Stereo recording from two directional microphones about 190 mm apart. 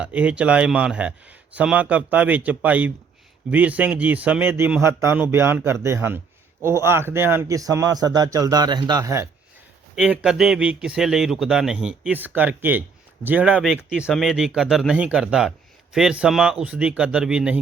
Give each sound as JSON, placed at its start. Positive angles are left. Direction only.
{"t": 0.0, "sound": "a man's voice", "side_deg": -5}